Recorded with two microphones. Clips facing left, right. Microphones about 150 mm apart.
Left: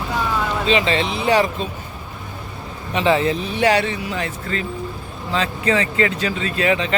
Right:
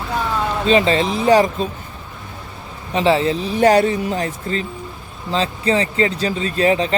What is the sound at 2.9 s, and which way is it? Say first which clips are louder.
Speech: right 1 dB; 30° right (ahead or behind).